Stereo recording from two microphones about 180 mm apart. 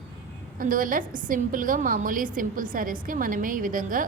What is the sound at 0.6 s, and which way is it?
A woman's voice, 50° right (ahead or behind).